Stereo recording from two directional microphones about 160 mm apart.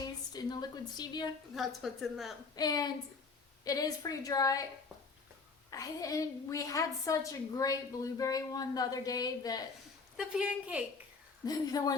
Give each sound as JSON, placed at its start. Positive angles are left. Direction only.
{"t": 0.3, "sound": "a woman's voice", "side_deg": 25}
{"t": 1.5, "sound": "a woman's voice", "side_deg": 0}
{"t": 2.6, "sound": "a woman's voice", "side_deg": 25}
{"t": 5.7, "sound": "a woman's voice", "side_deg": 20}
{"t": 10.2, "sound": "a woman's voice", "side_deg": -5}
{"t": 11.4, "sound": "a woman's voice", "side_deg": 25}